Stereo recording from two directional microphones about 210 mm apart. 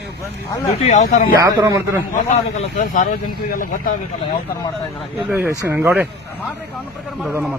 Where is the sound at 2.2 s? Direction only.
35° left (ahead or behind).